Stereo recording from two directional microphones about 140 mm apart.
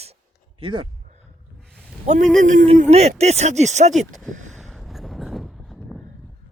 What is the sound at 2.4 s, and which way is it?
Speech, 65° right (ahead or behind).